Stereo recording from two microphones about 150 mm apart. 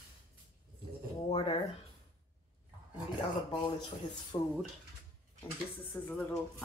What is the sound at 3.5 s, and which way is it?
Speech, 35° left (ahead or behind).